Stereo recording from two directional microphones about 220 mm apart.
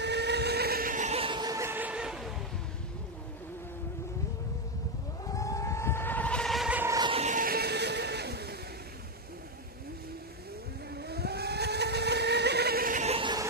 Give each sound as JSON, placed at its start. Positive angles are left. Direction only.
{"t": 0.0, "sound": "a sound", "side_deg": -50}
{"t": 5.3, "sound": "vehicle", "side_deg": 15}
{"t": 11.0, "sound": "vehicle", "side_deg": -45}